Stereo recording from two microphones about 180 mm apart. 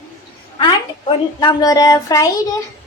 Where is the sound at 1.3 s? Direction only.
20° left (ahead or behind).